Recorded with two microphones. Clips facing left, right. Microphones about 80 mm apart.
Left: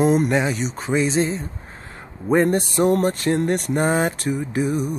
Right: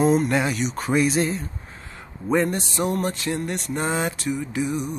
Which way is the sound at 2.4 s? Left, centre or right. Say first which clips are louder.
Left 6 dB; left.